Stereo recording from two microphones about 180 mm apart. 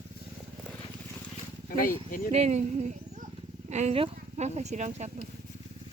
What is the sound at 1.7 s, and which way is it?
Speech, 50° left (ahead or behind).